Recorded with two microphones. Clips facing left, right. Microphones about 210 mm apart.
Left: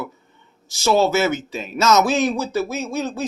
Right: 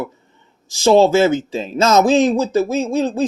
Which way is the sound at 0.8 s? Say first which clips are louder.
Right 6 dB; 30° right (ahead or behind).